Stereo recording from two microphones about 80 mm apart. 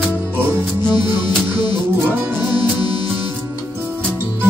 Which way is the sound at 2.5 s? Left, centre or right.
Left.